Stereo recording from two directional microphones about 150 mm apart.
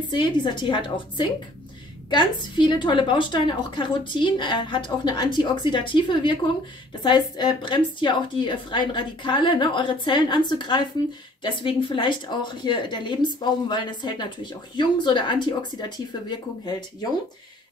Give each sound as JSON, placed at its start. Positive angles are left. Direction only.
{"t": 0.1, "sound": "a woman's voice", "side_deg": 30}